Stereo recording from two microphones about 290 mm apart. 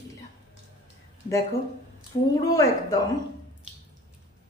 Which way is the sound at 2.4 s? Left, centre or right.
Centre.